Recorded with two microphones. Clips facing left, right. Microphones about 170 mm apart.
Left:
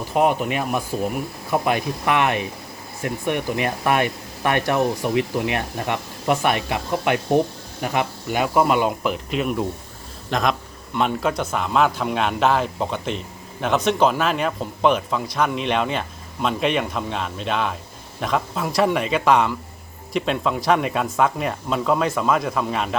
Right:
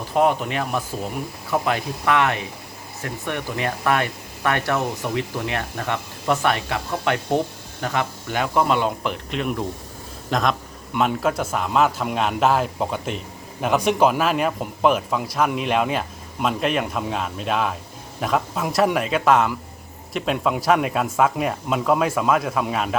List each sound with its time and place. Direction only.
0.1 s a man's voice: 10° left (ahead or behind)